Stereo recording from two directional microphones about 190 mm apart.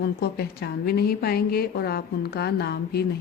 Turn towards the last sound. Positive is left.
turn(degrees=55)  # may be behind; listen again after turning